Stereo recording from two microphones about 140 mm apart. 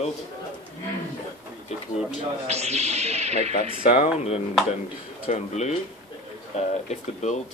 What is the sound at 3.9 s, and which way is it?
Speech, 50° left (ahead or behind).